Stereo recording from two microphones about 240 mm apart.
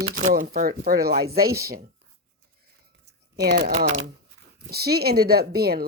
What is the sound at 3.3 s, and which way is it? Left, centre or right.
Speech, right.